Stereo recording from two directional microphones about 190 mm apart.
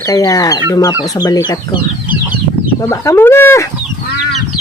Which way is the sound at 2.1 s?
10° right (ahead or behind).